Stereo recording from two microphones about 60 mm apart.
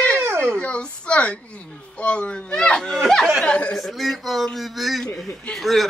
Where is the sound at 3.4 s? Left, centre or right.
Centre.